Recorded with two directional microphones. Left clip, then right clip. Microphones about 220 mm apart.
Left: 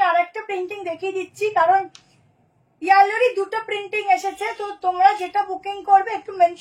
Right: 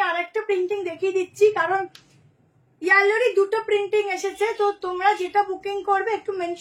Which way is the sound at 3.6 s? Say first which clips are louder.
Even; 10° right (ahead or behind).